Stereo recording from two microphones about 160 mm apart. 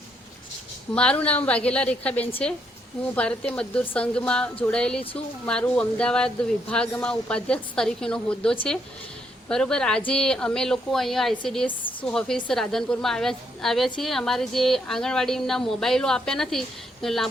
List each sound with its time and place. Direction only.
0.9 s a woman's voice: 5° left (ahead or behind)
11.6 s a woman's voice: 30° left (ahead or behind)
12.0 s a woman's voice: 5° left (ahead or behind)